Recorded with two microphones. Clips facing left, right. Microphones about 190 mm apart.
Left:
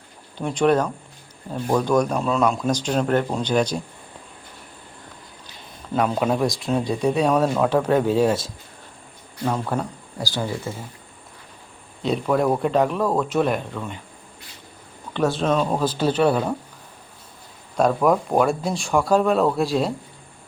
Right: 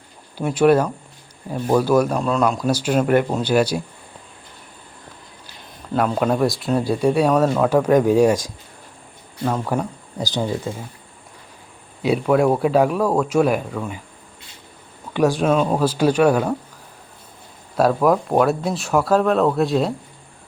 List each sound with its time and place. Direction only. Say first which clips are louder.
0.3 s speech: right 4 dB; 5° right (ahead or behind)
5.9 s speech: right 2 dB; centre (ahead or behind)
10.2 s speech: right 4 dB; 20° right (ahead or behind)
12.0 s speech: right 4 dB; 5° right (ahead or behind)
15.1 s speech: right 3 dB; 15° right (ahead or behind)
17.7 s speech: right 2 dB; 5° right (ahead or behind)